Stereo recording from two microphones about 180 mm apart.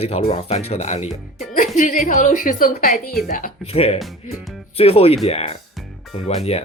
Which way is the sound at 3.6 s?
35° left (ahead or behind).